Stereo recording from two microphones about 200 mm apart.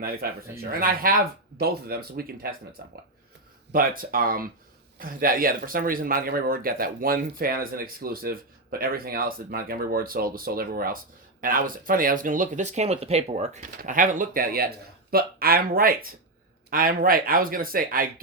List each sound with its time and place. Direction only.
0.0 s speech: 50° right (ahead or behind)